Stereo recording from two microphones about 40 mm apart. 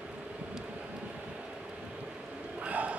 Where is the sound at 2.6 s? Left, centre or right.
Right.